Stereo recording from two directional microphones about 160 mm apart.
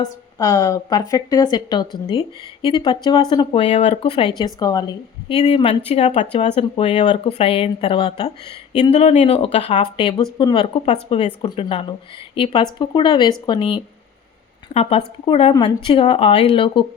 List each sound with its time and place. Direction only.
0.0 s a woman's voice: 20° left (ahead or behind)
5.3 s a woman's voice: 35° left (ahead or behind)
10.8 s a woman's voice: 40° left (ahead or behind)
14.7 s speech: 40° left (ahead or behind)